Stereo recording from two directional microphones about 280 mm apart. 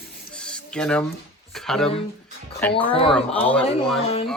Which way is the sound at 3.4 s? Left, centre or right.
Centre.